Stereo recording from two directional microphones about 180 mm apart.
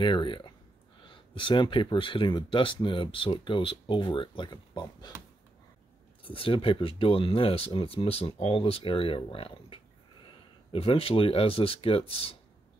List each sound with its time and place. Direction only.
0.0 s speech: 25° left (ahead or behind)
6.2 s speech: 30° left (ahead or behind)